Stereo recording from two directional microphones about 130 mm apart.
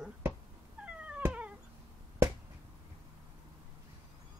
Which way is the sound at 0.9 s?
10° right (ahead or behind).